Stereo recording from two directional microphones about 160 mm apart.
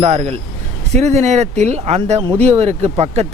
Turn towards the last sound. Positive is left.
turn(degrees=-40)  # may be behind; listen again after turning